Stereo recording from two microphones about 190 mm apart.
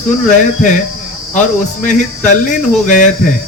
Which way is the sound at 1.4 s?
40° left (ahead or behind).